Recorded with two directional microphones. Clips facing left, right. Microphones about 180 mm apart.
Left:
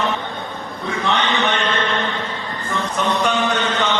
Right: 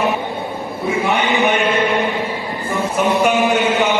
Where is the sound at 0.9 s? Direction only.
15° right (ahead or behind).